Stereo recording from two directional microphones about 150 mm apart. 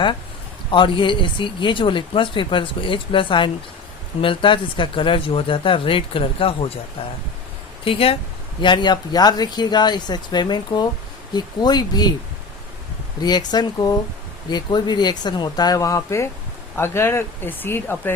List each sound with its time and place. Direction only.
0.7 s speech: 35° left (ahead or behind)
7.9 s speech: 40° left (ahead or behind)
13.2 s speech: 30° left (ahead or behind)